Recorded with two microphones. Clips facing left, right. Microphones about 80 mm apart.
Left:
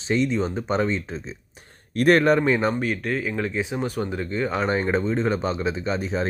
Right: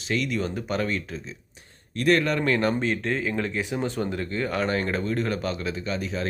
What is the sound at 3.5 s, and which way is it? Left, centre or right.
Speech, centre.